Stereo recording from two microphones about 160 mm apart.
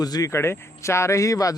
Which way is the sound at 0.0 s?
25° left (ahead or behind).